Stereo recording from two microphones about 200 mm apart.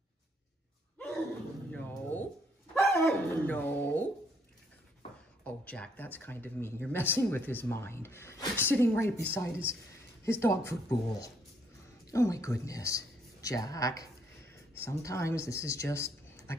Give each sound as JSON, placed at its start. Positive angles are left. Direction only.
{"t": 1.7, "sound": "a sound", "side_deg": 10}
{"t": 2.7, "sound": "dog", "side_deg": 15}
{"t": 5.4, "sound": "speech", "side_deg": 5}